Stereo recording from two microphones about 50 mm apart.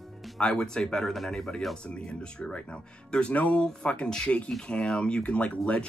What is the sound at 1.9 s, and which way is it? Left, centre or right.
Speech, centre.